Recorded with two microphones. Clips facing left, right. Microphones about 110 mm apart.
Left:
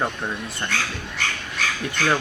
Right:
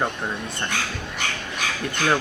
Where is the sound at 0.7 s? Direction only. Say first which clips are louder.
Left 2 dB; 15° right (ahead or behind).